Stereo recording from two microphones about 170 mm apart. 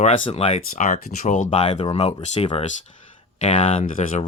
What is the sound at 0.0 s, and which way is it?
Speech, 35° left (ahead or behind).